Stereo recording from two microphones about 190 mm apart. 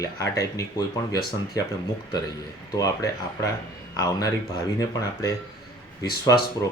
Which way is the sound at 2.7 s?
20° left (ahead or behind).